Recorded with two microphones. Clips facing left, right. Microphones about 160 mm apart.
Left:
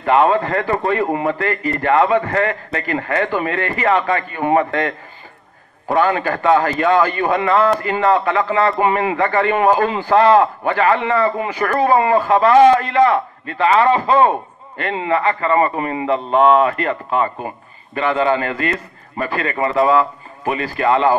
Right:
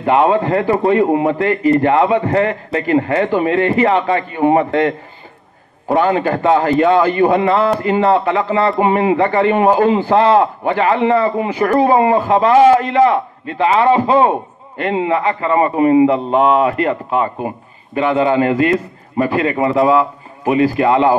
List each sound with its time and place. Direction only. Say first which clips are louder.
0.0 s a man's voice: right 2 dB; 20° right (ahead or behind)
5.9 s a man's voice: right 2 dB; 20° right (ahead or behind)
19.6 s speech: right 1 dB; centre (ahead or behind)
19.9 s a man's voice: right 2 dB; 15° right (ahead or behind)